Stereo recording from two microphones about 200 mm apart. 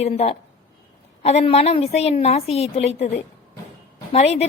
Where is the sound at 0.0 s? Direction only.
30° left (ahead or behind).